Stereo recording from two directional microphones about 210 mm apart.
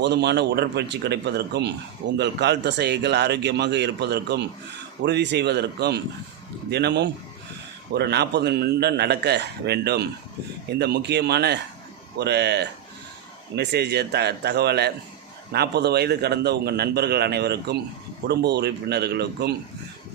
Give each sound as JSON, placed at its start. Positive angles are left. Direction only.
{"t": 0.0, "sound": "a man's voice", "side_deg": -55}